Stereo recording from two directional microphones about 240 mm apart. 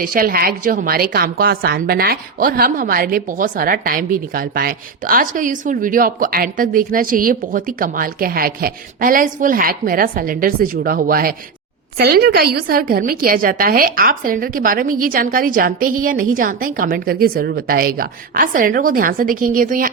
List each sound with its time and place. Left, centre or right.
0.0 s a woman's voice: right